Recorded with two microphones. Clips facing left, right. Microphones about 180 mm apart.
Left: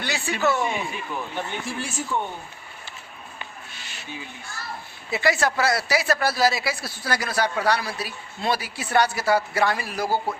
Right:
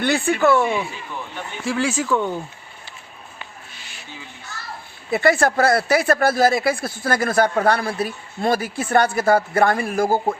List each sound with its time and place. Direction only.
0.0 s speech: 55° right (ahead or behind)
1.6 s speech: 90° right
5.1 s speech: 55° right (ahead or behind)